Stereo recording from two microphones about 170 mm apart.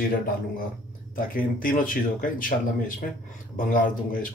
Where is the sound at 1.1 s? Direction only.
55° left (ahead or behind).